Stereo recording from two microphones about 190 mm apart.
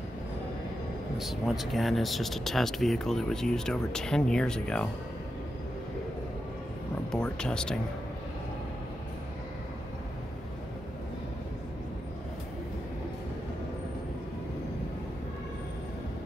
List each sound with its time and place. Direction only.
1.1 s speech: centre (ahead or behind)
7.1 s speech: 5° left (ahead or behind)